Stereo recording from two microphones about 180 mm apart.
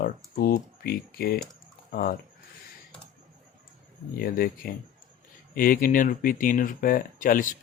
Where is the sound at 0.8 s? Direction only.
60° left (ahead or behind).